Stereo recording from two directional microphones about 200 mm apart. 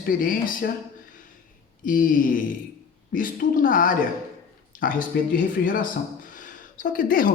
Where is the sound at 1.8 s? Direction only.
40° left (ahead or behind).